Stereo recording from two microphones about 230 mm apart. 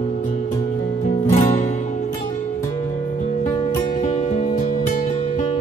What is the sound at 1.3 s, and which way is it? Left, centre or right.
Music, left.